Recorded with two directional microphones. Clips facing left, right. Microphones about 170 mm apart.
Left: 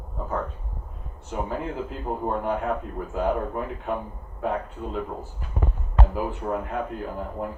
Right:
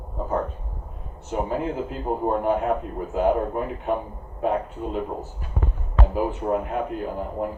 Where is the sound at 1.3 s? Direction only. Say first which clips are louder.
Right 4 dB; 20° right (ahead or behind).